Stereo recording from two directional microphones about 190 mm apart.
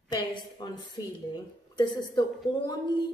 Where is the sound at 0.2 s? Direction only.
25° left (ahead or behind).